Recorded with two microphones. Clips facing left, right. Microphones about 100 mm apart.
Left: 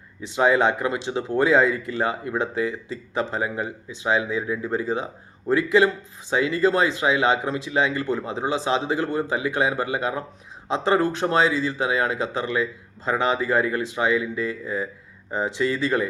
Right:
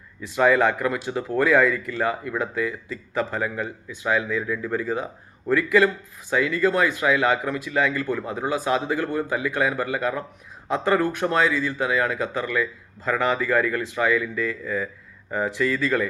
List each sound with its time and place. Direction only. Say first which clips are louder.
0.2 s speech: even; 25° left (ahead or behind)